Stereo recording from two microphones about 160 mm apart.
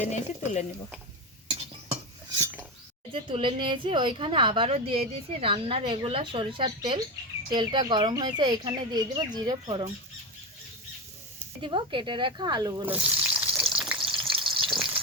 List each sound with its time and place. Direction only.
0.0 s speech: 45° left (ahead or behind)
1.5 s stir: 40° right (ahead or behind)
3.1 s speech: 30° right (ahead or behind)
11.6 s speech: 30° right (ahead or behind)
12.8 s frying: 10° right (ahead or behind)
13.7 s water: 5° right (ahead or behind)
14.6 s frying: 5° right (ahead or behind)